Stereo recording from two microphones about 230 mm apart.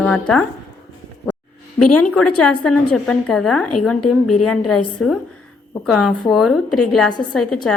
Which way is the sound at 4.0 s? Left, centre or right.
Left.